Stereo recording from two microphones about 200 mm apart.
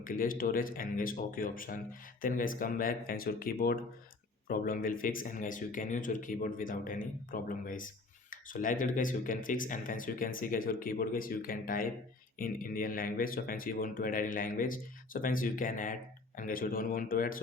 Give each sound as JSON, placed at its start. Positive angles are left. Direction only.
{"t": 0.0, "sound": "speech", "side_deg": 45}